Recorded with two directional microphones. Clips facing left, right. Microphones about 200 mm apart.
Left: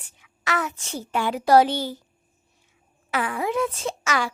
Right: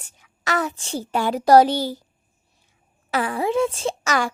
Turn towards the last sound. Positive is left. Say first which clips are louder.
# right 3 dB
turn(degrees=-30)  # may be behind; listen again after turning